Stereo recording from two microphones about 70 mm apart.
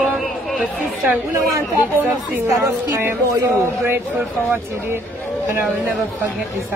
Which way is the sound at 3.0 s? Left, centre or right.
Right.